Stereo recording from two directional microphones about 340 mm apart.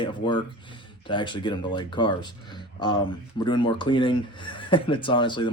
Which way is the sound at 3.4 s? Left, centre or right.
Centre.